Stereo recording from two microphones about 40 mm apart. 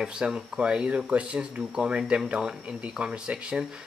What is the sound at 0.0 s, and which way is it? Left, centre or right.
Speech, centre.